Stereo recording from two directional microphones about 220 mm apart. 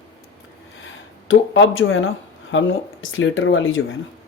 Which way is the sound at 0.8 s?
60° left (ahead or behind).